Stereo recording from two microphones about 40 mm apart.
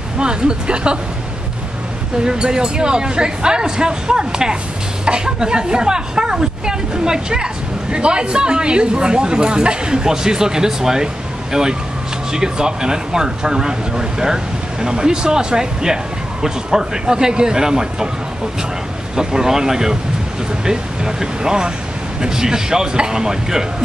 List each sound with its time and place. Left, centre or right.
0.2 s a woman's voice: right
2.2 s a woman's voice: centre
12.3 s speech: centre
19.1 s speech: centre